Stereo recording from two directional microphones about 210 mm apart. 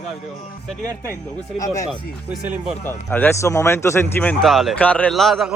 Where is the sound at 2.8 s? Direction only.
10° left (ahead or behind).